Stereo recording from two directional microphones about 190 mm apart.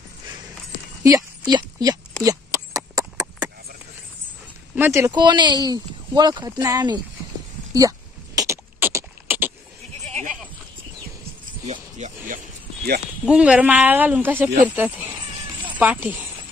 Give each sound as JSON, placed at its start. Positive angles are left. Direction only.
{"t": 1.0, "sound": "a woman's voice", "side_deg": -20}
{"t": 2.2, "sound": "a sound", "side_deg": -15}
{"t": 4.7, "sound": "speech", "side_deg": -10}
{"t": 8.4, "sound": "beatboxing", "side_deg": -15}
{"t": 10.0, "sound": "goat", "side_deg": 5}
{"t": 11.6, "sound": "a sound", "side_deg": -35}
{"t": 13.2, "sound": "speech", "side_deg": -5}
{"t": 15.0, "sound": "a sound", "side_deg": -25}
{"t": 15.8, "sound": "speech", "side_deg": -10}